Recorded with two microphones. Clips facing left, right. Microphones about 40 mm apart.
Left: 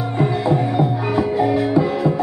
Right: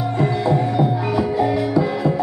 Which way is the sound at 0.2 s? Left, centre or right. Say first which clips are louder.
Left 1 dB; centre.